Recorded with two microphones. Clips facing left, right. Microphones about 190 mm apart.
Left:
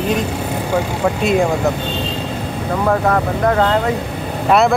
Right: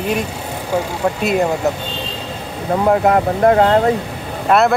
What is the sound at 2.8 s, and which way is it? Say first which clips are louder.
Speech: right 3 dB; 25° right (ahead or behind).